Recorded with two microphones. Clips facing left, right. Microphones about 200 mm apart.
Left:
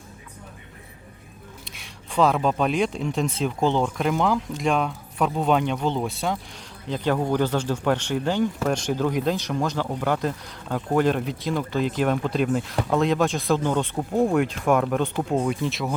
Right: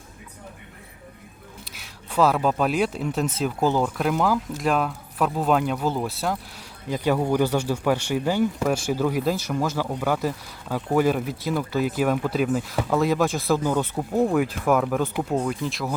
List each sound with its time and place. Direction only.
1.6 s speech: centre (ahead or behind)